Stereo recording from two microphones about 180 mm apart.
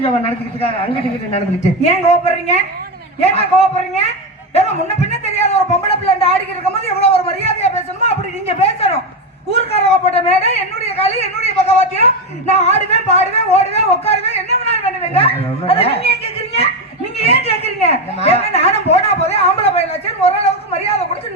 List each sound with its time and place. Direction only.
1.8 s a woman's voice: 35° left (ahead or behind)